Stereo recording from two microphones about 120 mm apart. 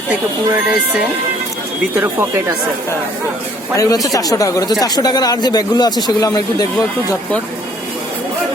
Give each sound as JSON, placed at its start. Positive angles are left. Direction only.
{"t": 0.1, "sound": "speech", "side_deg": -10}
{"t": 2.0, "sound": "speech", "side_deg": -20}
{"t": 3.8, "sound": "speech", "side_deg": 30}